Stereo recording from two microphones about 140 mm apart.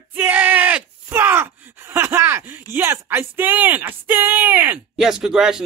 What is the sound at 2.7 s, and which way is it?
A man's voice, 15° right (ahead or behind).